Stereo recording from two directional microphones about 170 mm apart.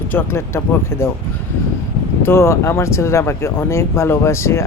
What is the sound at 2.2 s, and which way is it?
Speech, 15° left (ahead or behind).